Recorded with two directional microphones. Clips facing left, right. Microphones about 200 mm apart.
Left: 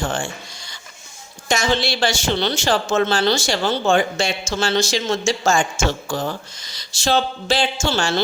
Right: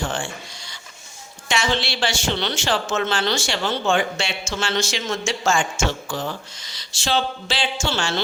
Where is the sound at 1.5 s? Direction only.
40° left (ahead or behind).